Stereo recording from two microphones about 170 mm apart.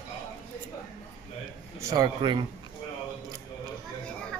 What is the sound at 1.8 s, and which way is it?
Speech, 20° right (ahead or behind).